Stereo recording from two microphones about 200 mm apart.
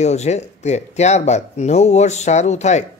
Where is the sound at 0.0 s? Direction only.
35° left (ahead or behind).